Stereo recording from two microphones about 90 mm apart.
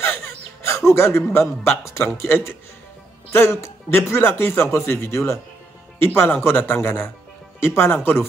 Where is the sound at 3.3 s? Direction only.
30° left (ahead or behind).